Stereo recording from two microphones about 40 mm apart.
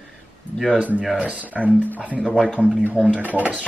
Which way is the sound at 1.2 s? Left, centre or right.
Right.